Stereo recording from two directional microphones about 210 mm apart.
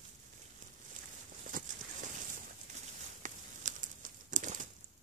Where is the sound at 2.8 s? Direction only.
35° right (ahead or behind).